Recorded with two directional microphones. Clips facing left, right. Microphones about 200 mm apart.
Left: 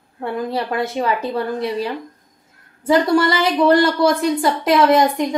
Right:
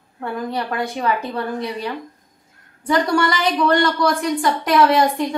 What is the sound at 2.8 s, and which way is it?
Speech, 25° left (ahead or behind).